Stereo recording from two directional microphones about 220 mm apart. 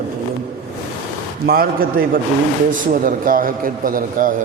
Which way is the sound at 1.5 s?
40° right (ahead or behind).